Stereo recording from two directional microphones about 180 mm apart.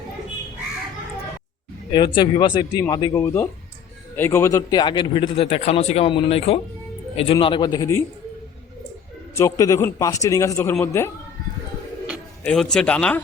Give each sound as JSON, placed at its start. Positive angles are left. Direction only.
{"t": 1.9, "sound": "a man's voice", "side_deg": 25}
{"t": 9.3, "sound": "a man's voice", "side_deg": 20}
{"t": 12.5, "sound": "speech", "side_deg": 5}